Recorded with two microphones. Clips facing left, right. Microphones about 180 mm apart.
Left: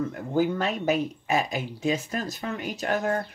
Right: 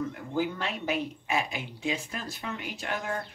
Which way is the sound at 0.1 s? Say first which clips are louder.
Left 6 dB; 45° left (ahead or behind).